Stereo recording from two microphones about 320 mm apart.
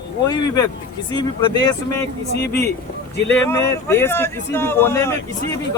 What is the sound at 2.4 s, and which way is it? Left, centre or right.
Speech, left.